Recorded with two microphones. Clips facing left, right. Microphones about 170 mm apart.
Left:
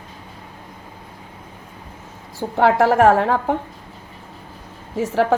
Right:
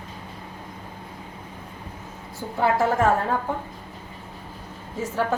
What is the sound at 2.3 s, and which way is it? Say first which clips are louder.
A woman's voice: left 6 dB; 85° left.